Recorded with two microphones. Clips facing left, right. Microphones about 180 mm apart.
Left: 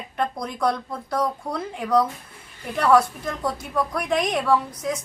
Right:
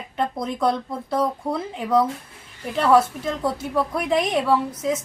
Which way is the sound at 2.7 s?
25° right (ahead or behind).